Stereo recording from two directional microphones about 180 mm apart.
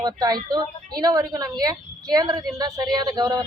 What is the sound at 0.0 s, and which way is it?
A woman's voice, 20° right (ahead or behind).